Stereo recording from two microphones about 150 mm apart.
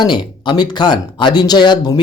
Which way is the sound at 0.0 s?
30° left (ahead or behind).